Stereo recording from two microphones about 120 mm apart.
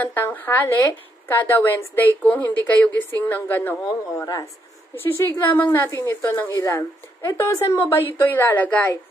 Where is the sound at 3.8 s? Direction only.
25° left (ahead or behind).